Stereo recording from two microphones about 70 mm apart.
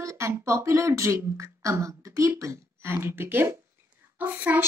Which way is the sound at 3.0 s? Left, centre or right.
Right.